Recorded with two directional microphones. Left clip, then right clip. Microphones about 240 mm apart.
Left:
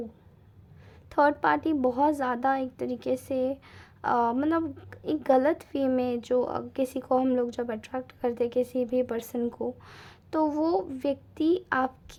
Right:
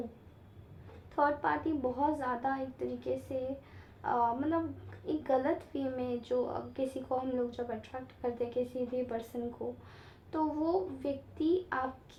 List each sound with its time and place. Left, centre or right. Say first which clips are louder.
1.1 s a woman's voice: left 7 dB; left